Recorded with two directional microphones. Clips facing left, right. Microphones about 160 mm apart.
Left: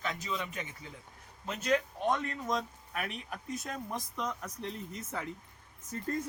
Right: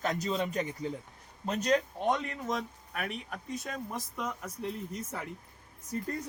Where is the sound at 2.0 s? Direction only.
20° right (ahead or behind).